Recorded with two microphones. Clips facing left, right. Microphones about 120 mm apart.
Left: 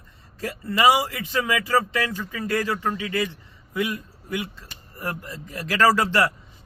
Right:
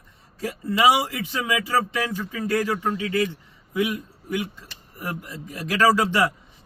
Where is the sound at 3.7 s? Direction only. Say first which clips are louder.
Right 2 dB; 15° right (ahead or behind).